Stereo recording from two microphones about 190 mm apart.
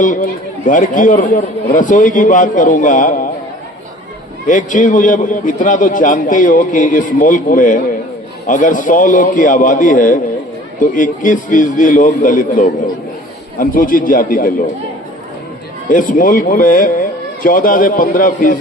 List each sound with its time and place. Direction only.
0.0 s a man's voice: 45° left (ahead or behind)
4.4 s a man's voice: 45° left (ahead or behind)
15.9 s a man's voice: 45° left (ahead or behind)